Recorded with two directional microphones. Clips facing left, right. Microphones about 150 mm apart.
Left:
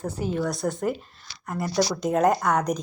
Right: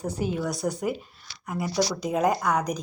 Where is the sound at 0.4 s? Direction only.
Centre (ahead or behind).